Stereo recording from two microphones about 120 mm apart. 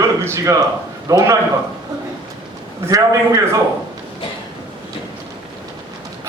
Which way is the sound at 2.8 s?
25° right (ahead or behind).